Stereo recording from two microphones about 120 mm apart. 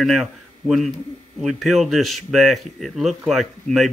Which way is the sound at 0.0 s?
Centre (ahead or behind).